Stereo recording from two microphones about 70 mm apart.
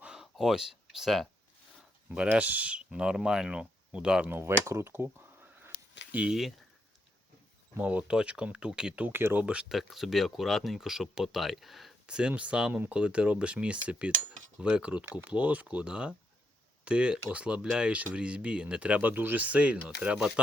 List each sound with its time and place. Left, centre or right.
0.0 s a sound: centre
2.0 s speech: centre
4.3 s a sound: right
7.8 s speech: right
9.0 s speech: right
9.4 s speech: centre
9.6 s speech: centre
12.0 s speech: centre